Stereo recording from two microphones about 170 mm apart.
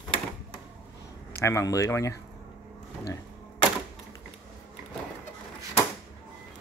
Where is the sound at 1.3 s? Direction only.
15° left (ahead or behind).